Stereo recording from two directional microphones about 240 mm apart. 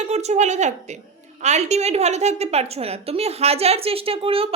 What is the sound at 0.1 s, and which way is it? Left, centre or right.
A woman's voice, right.